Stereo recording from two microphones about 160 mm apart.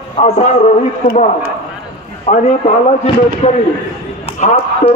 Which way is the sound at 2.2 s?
45° left (ahead or behind).